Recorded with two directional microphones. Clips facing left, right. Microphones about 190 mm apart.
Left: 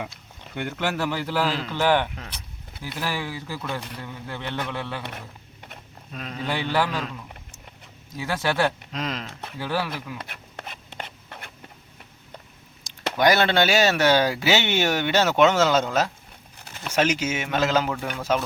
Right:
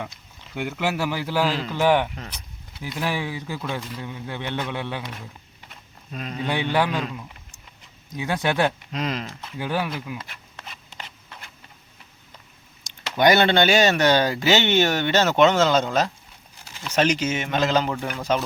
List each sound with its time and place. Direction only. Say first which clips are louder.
0.5 s a man's voice: right 1 dB; 5° right (ahead or behind)
6.1 s speech: right 3 dB; centre (ahead or behind)
6.5 s a man's voice: right 2 dB; 15° right (ahead or behind)
8.1 s speech: right 2 dB; 20° right (ahead or behind)
8.9 s speech: right 3 dB; centre (ahead or behind)
9.6 s a man's voice: right 1 dB; 15° right (ahead or behind)
10.2 s a sound: left 2 dB; 60° left (ahead or behind)
13.1 s speech: right 2 dB; centre (ahead or behind)
16.6 s a sound: left 1 dB; 55° left (ahead or behind)
16.9 s speech: right 2 dB; 10° left (ahead or behind)